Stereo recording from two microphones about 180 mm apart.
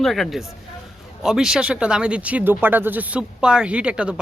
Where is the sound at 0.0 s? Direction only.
Centre (ahead or behind).